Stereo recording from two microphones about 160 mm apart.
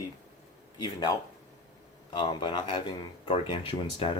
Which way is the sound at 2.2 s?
30° left (ahead or behind).